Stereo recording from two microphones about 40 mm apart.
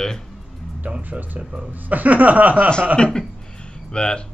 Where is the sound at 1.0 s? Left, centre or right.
Right.